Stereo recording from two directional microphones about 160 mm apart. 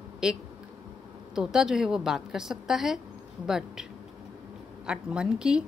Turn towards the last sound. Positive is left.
turn(degrees=-5)  # may be behind; listen again after turning